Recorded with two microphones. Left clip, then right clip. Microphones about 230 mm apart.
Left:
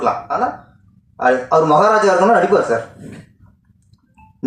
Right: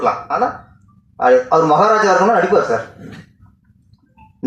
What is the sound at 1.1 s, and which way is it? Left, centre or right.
A man's voice, left.